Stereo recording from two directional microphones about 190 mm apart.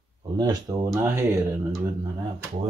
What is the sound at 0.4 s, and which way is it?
Speech, 20° right (ahead or behind).